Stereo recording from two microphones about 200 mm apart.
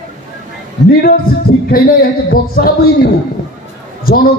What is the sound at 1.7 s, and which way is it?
Speech, 50° left (ahead or behind).